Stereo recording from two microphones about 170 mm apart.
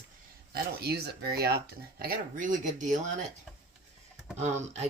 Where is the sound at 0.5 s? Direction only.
65° right (ahead or behind).